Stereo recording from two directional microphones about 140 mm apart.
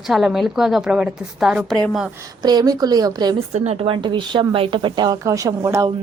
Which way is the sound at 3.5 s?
45° right (ahead or behind).